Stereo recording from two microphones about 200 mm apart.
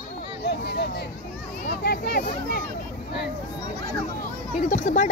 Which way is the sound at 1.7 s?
50° left (ahead or behind).